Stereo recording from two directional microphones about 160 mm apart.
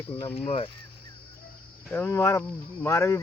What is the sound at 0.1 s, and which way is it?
Speech, 35° left (ahead or behind).